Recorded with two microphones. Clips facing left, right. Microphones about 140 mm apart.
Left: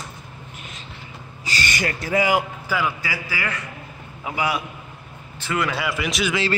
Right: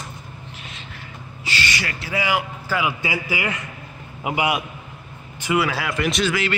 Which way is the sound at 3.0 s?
20° right (ahead or behind).